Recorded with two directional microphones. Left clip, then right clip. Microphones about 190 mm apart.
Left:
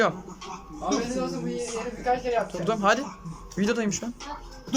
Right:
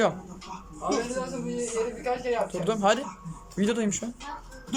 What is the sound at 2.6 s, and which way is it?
Speech, 5° right (ahead or behind).